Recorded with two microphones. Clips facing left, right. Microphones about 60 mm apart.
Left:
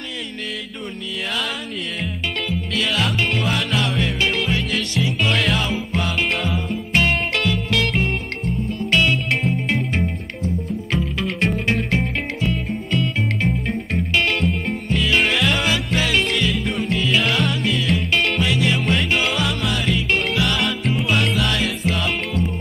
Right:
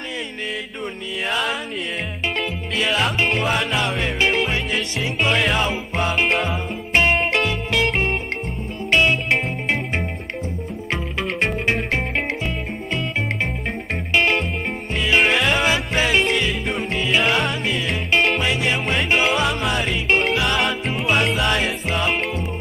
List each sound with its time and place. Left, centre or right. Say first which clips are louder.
2.7 s music: right 2 dB; centre
5.3 s music: right 2 dB; centre
6.3 s music: right 1 dB; centre
13.9 s music: right 2 dB; right
15.9 s music: right 2 dB; centre
17.7 s music: even; centre
18.7 s music: even; centre